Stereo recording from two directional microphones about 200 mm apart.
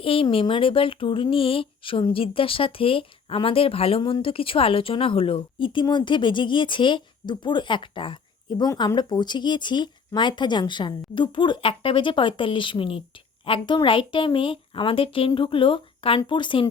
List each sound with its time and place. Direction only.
0.0 s speech: 25° left (ahead or behind)